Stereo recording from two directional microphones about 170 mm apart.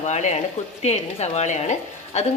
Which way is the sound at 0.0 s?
45° left (ahead or behind).